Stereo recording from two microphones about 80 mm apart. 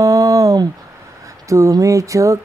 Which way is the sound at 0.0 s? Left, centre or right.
Right.